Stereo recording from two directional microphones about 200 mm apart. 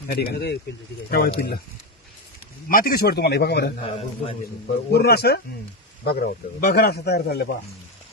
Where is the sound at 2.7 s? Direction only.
45° left (ahead or behind).